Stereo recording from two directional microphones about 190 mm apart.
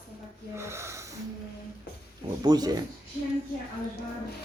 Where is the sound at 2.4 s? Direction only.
20° right (ahead or behind).